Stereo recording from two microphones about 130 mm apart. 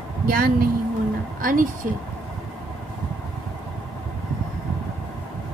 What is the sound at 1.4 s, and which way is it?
Speech, 90° right.